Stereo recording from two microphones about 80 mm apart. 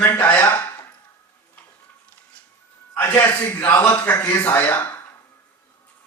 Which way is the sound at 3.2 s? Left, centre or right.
Left.